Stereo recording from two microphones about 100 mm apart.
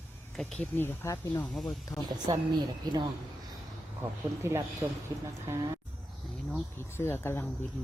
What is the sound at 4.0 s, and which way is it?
Speech, 25° right (ahead or behind).